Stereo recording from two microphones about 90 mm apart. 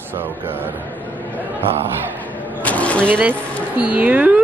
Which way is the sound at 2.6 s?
15° left (ahead or behind).